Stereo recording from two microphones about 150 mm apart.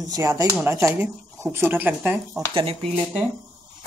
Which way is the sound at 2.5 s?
40° right (ahead or behind).